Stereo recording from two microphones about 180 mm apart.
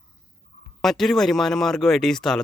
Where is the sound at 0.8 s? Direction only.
Centre (ahead or behind).